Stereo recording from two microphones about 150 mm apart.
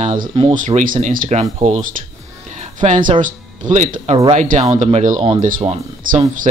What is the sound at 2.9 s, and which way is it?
Speech, 60° right (ahead or behind).